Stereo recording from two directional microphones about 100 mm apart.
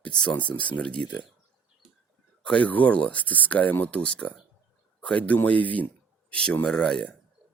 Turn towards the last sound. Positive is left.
turn(degrees=10)  # may be behind; listen again after turning